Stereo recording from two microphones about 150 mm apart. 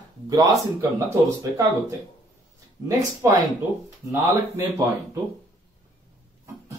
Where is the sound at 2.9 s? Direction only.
20° right (ahead or behind).